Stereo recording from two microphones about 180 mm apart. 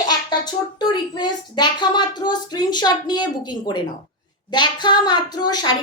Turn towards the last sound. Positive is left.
turn(degrees=25)  # may be behind; listen again after turning